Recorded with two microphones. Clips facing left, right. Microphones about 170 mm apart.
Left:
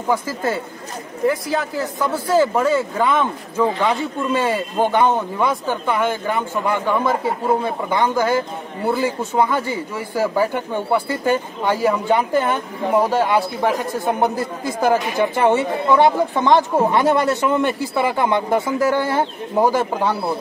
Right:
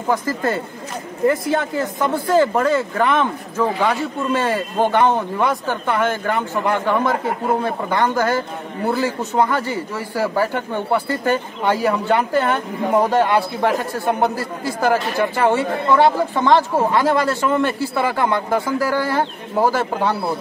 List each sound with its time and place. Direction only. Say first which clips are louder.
0.1 s a man's voice: right 1 dB; 10° left (ahead or behind)